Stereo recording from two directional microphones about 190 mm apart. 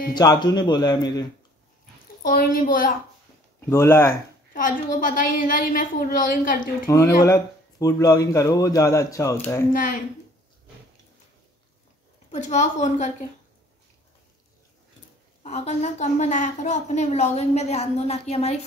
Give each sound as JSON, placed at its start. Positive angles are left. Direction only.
{"t": 0.1, "sound": "a man's voice", "side_deg": 20}
{"t": 2.2, "sound": "a woman's voice", "side_deg": 50}
{"t": 3.6, "sound": "speech", "side_deg": 15}
{"t": 4.9, "sound": "a woman's voice", "side_deg": 45}
{"t": 7.8, "sound": "speech", "side_deg": 20}
{"t": 9.7, "sound": "a woman's voice", "side_deg": 45}
{"t": 12.3, "sound": "speech", "side_deg": 40}
{"t": 15.4, "sound": "speech", "side_deg": 35}